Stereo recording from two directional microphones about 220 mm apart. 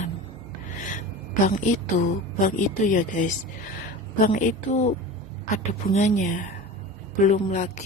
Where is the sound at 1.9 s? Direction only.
30° left (ahead or behind).